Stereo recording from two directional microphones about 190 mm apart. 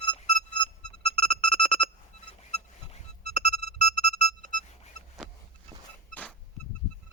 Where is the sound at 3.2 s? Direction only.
35° left (ahead or behind).